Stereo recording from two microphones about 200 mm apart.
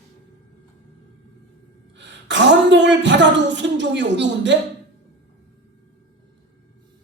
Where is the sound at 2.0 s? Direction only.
60° right (ahead or behind).